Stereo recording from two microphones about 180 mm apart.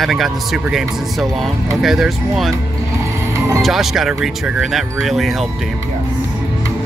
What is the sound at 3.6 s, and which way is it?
Speech, centre (ahead or behind).